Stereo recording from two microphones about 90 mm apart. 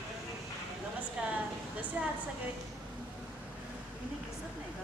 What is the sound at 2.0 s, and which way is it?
Speech, 20° right (ahead or behind).